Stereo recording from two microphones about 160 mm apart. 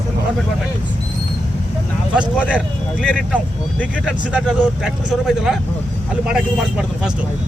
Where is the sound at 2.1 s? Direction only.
5° right (ahead or behind).